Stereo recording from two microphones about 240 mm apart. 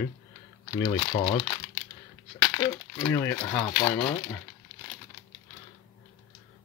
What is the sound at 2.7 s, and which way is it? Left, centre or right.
Speech, centre.